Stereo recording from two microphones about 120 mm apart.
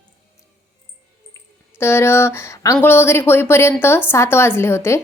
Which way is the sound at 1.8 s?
20° left (ahead or behind).